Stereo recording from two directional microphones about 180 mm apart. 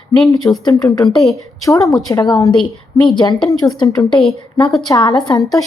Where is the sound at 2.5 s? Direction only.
Centre (ahead or behind).